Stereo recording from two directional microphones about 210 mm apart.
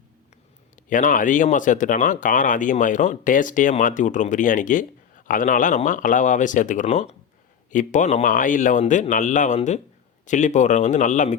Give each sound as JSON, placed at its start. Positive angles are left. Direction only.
{"t": 0.9, "sound": "speech", "side_deg": 40}